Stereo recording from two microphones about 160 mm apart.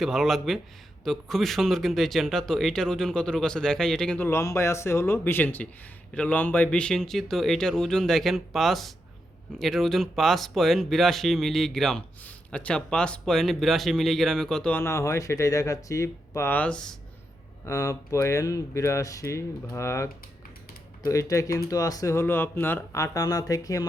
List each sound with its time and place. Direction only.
0.0 s speech: centre (ahead or behind)
17.7 s speech: 20° left (ahead or behind)